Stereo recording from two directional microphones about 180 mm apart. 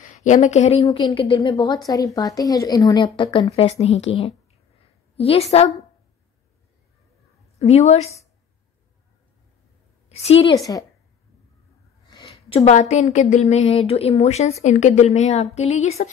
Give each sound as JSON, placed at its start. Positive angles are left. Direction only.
{"t": 0.0, "sound": "speech", "side_deg": 45}
{"t": 7.5, "sound": "a woman's voice", "side_deg": 35}
{"t": 10.0, "sound": "a woman's voice", "side_deg": 35}
{"t": 12.1, "sound": "speech", "side_deg": 30}